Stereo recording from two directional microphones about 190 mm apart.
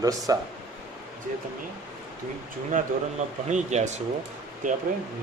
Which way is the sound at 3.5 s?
40° right (ahead or behind).